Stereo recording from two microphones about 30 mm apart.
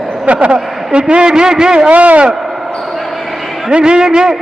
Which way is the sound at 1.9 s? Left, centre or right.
Right.